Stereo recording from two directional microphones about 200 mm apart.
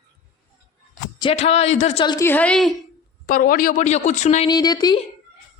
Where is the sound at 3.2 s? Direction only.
45° left (ahead or behind).